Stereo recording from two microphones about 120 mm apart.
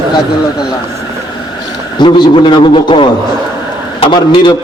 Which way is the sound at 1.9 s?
40° left (ahead or behind).